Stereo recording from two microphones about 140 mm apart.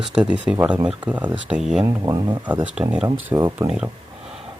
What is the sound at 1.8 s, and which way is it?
Speech, 20° right (ahead or behind).